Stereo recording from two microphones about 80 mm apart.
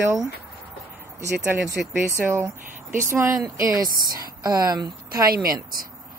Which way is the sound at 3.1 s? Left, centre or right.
Right.